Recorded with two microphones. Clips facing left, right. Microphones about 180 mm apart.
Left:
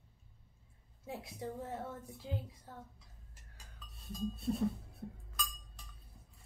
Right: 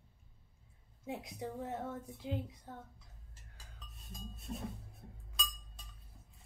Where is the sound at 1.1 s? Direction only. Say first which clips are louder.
Right 1 dB; 20° right (ahead or behind).